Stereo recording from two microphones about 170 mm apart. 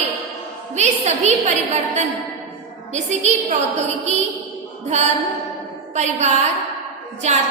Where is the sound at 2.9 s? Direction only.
40° right (ahead or behind).